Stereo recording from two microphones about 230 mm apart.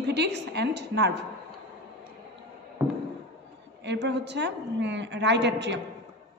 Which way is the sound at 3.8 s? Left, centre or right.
Right.